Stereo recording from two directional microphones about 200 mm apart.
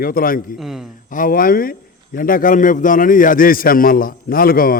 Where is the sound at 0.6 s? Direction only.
Centre (ahead or behind).